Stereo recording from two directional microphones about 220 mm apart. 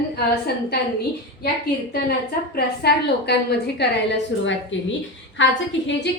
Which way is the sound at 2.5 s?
45° left (ahead or behind).